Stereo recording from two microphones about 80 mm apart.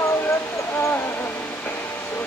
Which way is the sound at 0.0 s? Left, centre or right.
Left.